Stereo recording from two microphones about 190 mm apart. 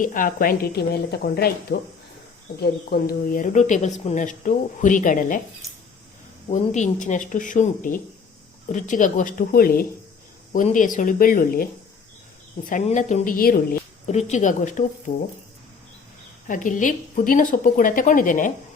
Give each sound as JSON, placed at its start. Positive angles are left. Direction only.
{"t": 0.0, "sound": "speech", "side_deg": 45}
{"t": 6.5, "sound": "speech", "side_deg": 40}
{"t": 14.1, "sound": "speech", "side_deg": 35}
{"t": 16.5, "sound": "speech", "side_deg": 45}